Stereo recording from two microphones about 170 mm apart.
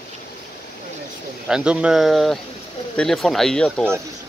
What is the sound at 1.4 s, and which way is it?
Speech, 5° right (ahead or behind).